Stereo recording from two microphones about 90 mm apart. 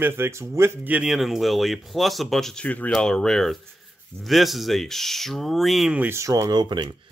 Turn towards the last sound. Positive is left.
turn(degrees=-55)  # may be behind; listen again after turning